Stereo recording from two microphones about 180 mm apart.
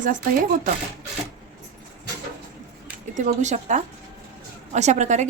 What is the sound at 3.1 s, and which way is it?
A woman's voice, 40° right (ahead or behind).